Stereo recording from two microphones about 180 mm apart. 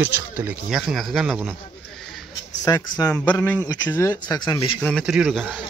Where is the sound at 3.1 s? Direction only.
10° left (ahead or behind); by 4.7 s 25° left (ahead or behind).